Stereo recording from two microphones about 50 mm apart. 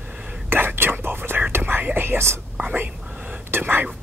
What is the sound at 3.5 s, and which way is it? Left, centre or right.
Whispering, right.